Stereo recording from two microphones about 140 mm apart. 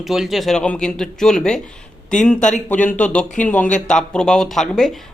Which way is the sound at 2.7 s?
10° left (ahead or behind).